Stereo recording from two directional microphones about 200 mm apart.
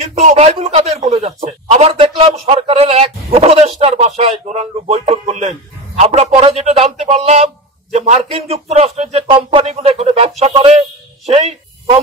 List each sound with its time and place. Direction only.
0.2 s a man's voice: 35° right (ahead or behind)